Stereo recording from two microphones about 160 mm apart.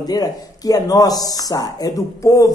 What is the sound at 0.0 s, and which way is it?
Speech, 25° left (ahead or behind).